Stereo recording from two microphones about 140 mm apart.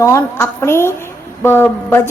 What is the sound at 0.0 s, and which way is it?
A woman's voice, 20° left (ahead or behind).